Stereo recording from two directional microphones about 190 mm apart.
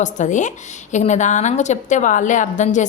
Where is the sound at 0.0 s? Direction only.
40° left (ahead or behind).